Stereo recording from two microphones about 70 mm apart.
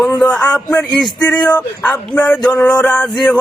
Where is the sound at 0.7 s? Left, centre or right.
Centre.